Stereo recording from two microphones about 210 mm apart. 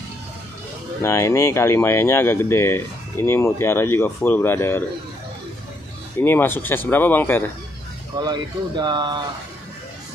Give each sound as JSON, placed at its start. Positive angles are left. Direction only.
{"t": 1.0, "sound": "speech", "side_deg": 15}
{"t": 6.2, "sound": "speech", "side_deg": 10}
{"t": 8.2, "sound": "speech", "side_deg": -20}